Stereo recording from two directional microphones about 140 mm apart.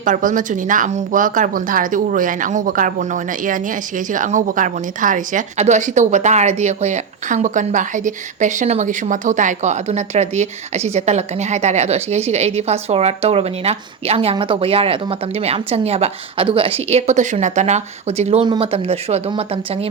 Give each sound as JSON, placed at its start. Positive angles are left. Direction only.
{"t": 0.0, "sound": "a woman's voice", "side_deg": -70}
{"t": 18.4, "sound": "a woman's voice", "side_deg": -35}